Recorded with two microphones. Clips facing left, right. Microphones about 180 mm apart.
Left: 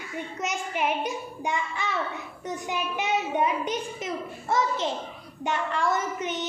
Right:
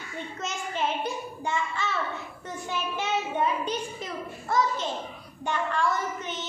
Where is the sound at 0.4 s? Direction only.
15° left (ahead or behind).